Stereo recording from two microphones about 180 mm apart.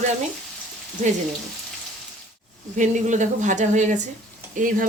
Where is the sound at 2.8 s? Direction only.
45° right (ahead or behind).